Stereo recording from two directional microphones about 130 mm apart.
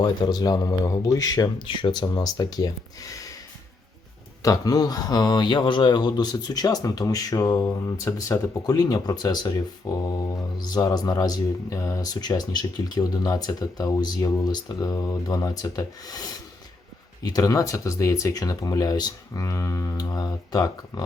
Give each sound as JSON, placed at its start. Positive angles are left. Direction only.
{"t": 0.0, "sound": "speech", "side_deg": 30}
{"t": 4.4, "sound": "speech", "side_deg": 30}
{"t": 10.6, "sound": "speech", "side_deg": 30}